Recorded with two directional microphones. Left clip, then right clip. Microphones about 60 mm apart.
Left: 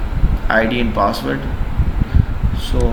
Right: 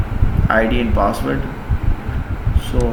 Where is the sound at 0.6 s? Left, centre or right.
Centre.